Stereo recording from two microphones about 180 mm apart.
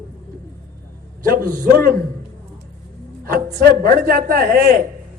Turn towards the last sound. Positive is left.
turn(degrees=-55)  # may be behind; listen again after turning